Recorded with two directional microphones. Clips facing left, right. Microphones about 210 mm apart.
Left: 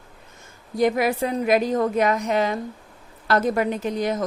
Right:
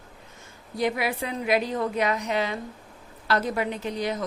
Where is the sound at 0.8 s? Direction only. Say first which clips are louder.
Left 6 dB; 45° left (ahead or behind).